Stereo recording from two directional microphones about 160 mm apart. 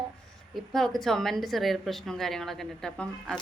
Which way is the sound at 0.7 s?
Centre (ahead or behind).